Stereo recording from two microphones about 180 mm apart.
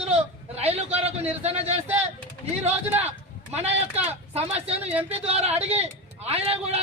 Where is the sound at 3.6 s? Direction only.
35° right (ahead or behind).